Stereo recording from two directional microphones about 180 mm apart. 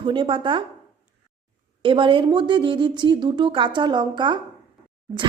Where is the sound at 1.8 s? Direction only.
30° right (ahead or behind).